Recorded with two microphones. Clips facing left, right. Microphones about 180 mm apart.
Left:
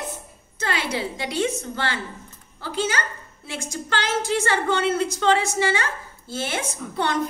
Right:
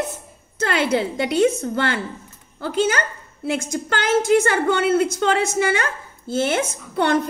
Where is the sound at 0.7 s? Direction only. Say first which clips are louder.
Right 6 dB; 55° right (ahead or behind).